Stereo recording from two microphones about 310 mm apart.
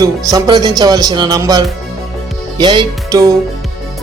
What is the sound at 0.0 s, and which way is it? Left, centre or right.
Speech, centre.